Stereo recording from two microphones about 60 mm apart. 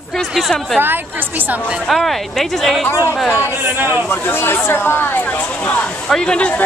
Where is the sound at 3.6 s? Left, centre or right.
Right.